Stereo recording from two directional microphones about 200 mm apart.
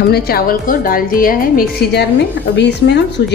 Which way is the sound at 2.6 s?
55° left (ahead or behind).